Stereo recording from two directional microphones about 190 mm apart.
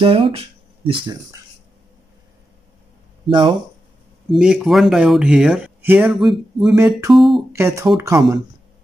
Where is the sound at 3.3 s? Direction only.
25° right (ahead or behind).